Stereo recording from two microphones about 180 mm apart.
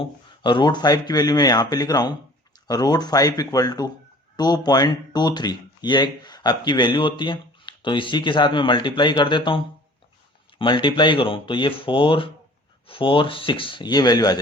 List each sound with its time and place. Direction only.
0.0 s speech: 25° left (ahead or behind)